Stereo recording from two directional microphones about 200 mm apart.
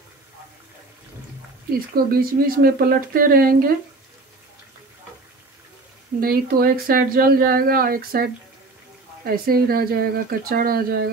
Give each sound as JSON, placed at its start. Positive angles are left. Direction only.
{"t": 1.7, "sound": "speech", "side_deg": -45}
{"t": 6.2, "sound": "speech", "side_deg": -50}